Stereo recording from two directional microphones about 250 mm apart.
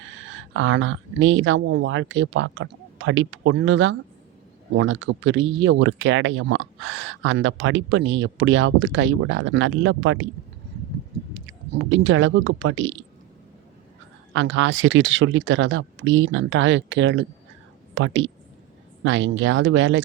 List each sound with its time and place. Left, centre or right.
0.2 s speech: right
11.3 s speech: right
14.3 s speech: right